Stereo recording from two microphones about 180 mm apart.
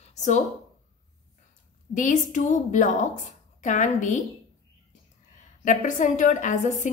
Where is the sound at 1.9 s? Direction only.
45° left (ahead or behind).